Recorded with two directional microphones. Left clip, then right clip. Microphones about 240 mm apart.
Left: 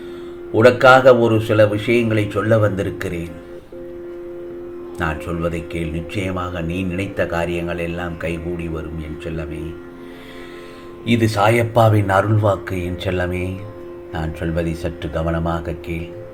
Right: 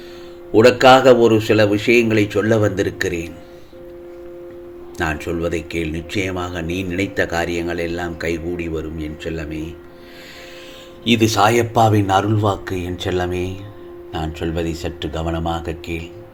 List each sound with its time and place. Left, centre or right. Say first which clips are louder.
0.5 s speech: even; right
4.9 s speech: right 2 dB; right
11.0 s speech: right 2 dB; right